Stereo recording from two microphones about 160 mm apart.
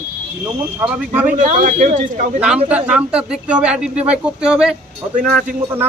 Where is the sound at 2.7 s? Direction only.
10° right (ahead or behind).